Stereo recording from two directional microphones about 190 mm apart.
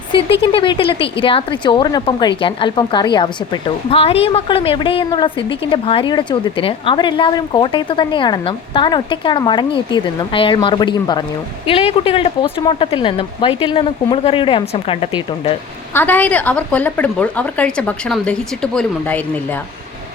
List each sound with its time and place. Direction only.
0.1 s speech: 30° left (ahead or behind)
16.0 s speech: 10° left (ahead or behind)